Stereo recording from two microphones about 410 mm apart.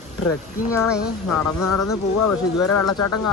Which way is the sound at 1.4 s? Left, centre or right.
Left.